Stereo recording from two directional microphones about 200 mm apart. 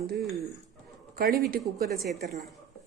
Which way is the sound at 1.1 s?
50° right (ahead or behind).